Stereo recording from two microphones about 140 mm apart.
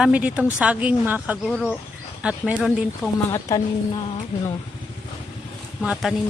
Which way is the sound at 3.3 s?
25° left (ahead or behind).